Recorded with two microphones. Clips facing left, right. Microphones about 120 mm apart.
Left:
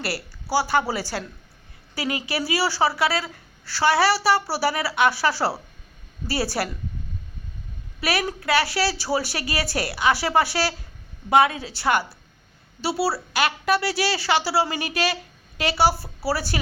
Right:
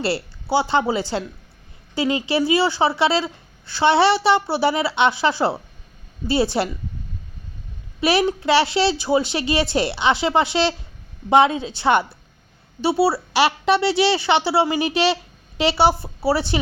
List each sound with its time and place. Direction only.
0.0 s a woman's voice: 25° right (ahead or behind)
8.0 s a woman's voice: 25° right (ahead or behind)